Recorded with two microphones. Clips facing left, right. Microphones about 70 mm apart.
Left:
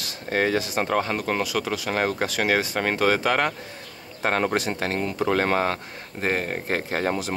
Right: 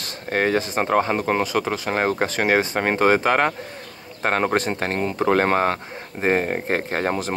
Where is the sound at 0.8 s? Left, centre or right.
Right.